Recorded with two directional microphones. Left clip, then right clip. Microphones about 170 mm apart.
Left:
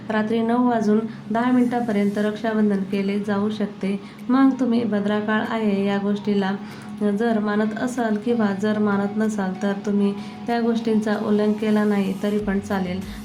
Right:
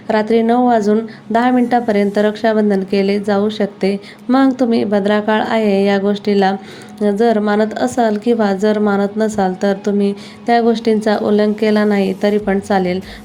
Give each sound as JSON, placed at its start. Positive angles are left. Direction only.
{"t": 0.1, "sound": "a woman's voice", "side_deg": -35}